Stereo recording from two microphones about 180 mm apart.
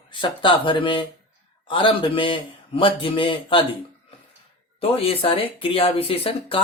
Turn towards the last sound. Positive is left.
turn(degrees=30)  # may be behind; listen again after turning